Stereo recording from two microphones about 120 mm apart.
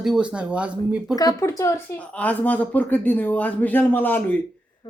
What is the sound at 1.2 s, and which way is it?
Speech, 30° left (ahead or behind).